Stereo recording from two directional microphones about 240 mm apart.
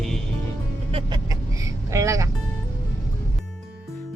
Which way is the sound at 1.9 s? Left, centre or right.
Centre.